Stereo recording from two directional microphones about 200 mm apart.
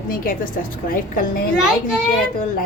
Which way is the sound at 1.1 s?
45° left (ahead or behind).